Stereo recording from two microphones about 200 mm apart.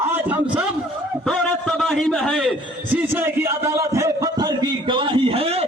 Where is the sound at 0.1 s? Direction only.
10° right (ahead or behind).